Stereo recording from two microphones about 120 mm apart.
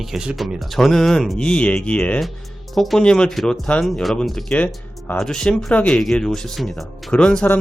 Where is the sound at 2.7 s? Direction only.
Centre (ahead or behind).